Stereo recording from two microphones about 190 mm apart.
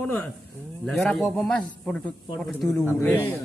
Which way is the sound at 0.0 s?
Centre (ahead or behind).